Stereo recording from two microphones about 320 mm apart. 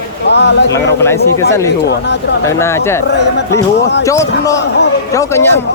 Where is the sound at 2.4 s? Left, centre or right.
Centre.